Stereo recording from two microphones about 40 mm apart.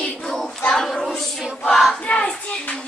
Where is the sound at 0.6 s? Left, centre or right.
Centre.